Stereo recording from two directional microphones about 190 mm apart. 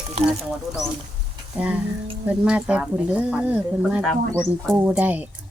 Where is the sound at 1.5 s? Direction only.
5° right (ahead or behind).